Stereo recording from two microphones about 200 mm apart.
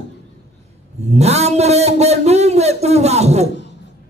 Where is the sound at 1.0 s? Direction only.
35° right (ahead or behind).